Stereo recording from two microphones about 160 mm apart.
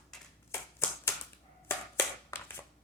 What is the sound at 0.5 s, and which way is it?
Hands, 15° left (ahead or behind).